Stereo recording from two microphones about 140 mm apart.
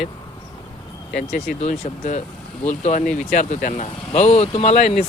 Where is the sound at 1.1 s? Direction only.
60° left (ahead or behind).